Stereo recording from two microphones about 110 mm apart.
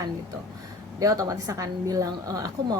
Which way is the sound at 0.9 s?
35° right (ahead or behind).